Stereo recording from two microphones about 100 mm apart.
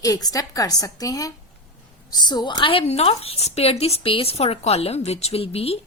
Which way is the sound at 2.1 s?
45° left (ahead or behind).